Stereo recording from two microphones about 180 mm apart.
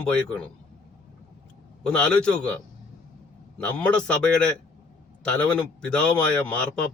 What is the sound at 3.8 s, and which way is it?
Speech, 5° left (ahead or behind).